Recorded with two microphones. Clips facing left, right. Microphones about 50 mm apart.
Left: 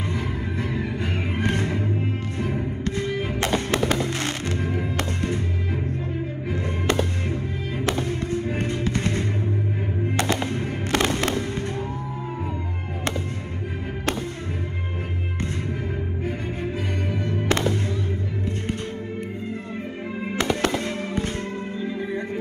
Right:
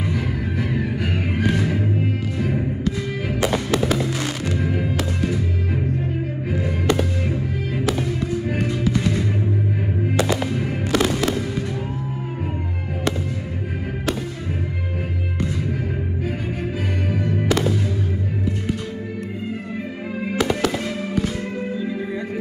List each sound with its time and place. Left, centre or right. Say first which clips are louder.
0.0 s music: right 3 dB; left
0.7 s music: right 3 dB; right
1.1 s music: right 3 dB; left
2.8 s music: right 1 dB; left
3.5 s fireworks: even; left
4.9 s music: right 3 dB; left
6.9 s music: right 2 dB; left
17.2 s music: right 2 dB; left
20.3 s fireworks: right 2 dB; left